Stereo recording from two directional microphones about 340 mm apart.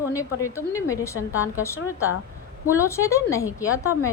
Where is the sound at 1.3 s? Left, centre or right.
Centre.